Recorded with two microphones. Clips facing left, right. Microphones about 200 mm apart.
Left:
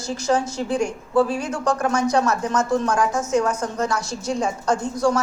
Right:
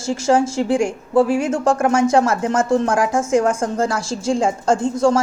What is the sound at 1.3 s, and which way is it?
A woman's voice, 25° right (ahead or behind).